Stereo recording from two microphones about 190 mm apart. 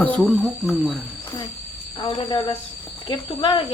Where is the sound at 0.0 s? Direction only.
5° left (ahead or behind).